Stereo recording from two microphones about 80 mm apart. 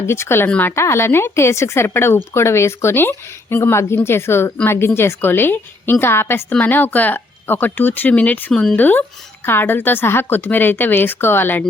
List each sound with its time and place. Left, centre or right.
0.1 s a woman's voice: left
0.4 s speech: centre
0.8 s a woman's voice: left